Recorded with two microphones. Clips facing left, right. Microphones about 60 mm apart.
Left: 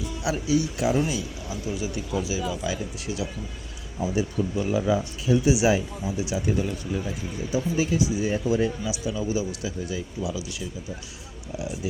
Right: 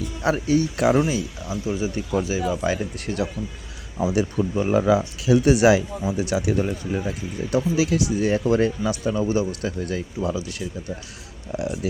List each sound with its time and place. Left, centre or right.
0.2 s speech: right
1.0 s speech: right
2.1 s speech: right
4.0 s speech: right
4.5 s speech: right
4.8 s speech: right
10.2 s speech: right
10.5 s speech: right